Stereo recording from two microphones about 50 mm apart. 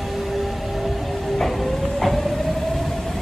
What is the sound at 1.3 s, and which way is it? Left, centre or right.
Train, centre.